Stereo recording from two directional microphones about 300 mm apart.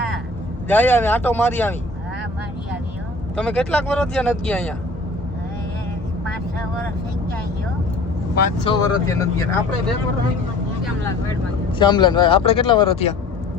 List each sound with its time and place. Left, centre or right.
0.7 s speech: centre
3.3 s speech: centre
8.7 s speech: centre
11.8 s speech: centre